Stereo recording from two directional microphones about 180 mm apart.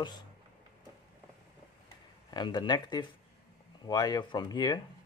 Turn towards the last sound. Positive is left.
turn(degrees=20)  # may be behind; listen again after turning